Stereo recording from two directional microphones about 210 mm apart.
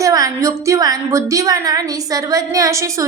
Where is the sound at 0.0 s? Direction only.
15° right (ahead or behind).